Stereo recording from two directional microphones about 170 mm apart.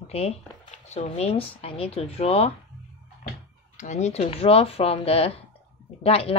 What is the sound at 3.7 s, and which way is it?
Speech, 45° left (ahead or behind).